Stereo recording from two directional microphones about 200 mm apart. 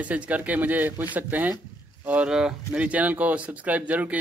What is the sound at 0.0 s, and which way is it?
A man's voice, 5° right (ahead or behind).